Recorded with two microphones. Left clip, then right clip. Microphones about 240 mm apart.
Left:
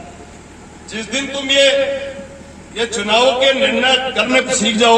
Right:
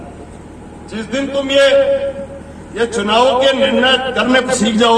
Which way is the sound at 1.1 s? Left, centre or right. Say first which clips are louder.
Right 1 dB; left.